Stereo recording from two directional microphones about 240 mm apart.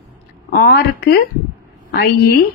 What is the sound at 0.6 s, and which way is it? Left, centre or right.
A woman's voice, left.